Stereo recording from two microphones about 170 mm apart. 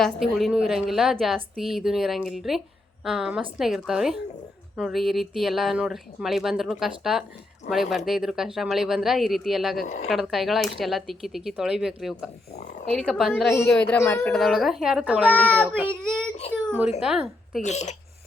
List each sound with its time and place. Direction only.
0.0 s a woman's voice: centre (ahead or behind)
9.8 s speech: 45° left (ahead or behind)
10.1 s a woman's voice: centre (ahead or behind)
14.4 s a woman's voice: centre (ahead or behind)
15.3 s a woman's voice: 5° left (ahead or behind)
17.6 s speech: 45° left (ahead or behind)